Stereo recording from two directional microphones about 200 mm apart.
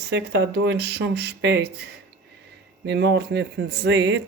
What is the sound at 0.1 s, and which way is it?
Speech, 60° right (ahead or behind).